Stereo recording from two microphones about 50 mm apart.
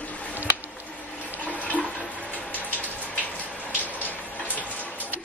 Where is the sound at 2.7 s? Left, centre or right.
Left.